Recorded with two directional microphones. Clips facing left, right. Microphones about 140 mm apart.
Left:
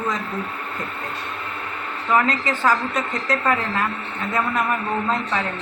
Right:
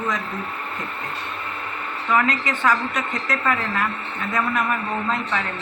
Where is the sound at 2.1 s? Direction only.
30° left (ahead or behind).